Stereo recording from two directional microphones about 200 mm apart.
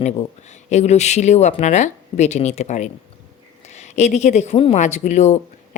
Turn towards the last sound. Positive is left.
turn(degrees=35)  # may be behind; listen again after turning